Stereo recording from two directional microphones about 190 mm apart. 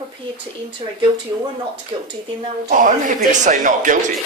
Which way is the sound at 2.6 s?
45° right (ahead or behind).